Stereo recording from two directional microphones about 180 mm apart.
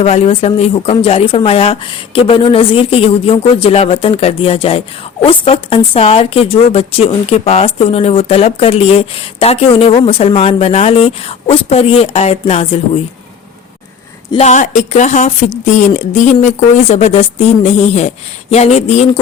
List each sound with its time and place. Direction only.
0.0 s a woman's voice: 35° left (ahead or behind)
14.3 s a woman's voice: 35° left (ahead or behind)